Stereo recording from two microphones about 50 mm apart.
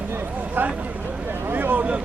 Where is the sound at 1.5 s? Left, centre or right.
Right.